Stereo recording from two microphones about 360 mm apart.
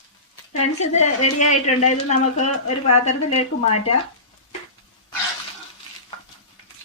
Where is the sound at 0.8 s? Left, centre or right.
Centre.